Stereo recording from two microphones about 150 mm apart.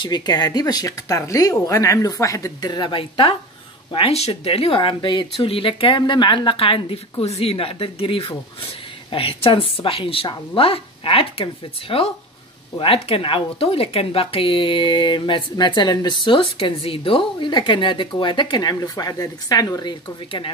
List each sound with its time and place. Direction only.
0.0 s speech: 30° left (ahead or behind)